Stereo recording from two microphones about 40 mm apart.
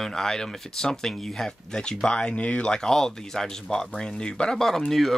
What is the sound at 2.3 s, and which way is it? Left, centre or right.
Speech, left.